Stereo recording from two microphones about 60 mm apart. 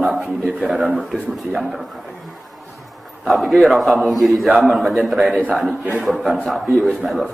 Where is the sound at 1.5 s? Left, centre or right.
Centre.